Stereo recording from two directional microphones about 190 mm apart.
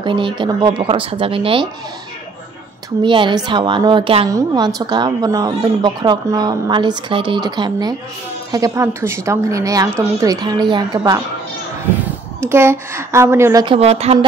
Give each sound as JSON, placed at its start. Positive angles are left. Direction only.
{"t": 0.0, "sound": "a woman's voice", "side_deg": -25}
{"t": 3.0, "sound": "a woman's voice", "side_deg": -25}
{"t": 13.7, "sound": "speech", "side_deg": -35}